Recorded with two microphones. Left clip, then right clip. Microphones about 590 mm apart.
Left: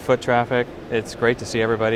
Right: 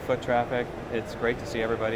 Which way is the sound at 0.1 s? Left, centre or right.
Left.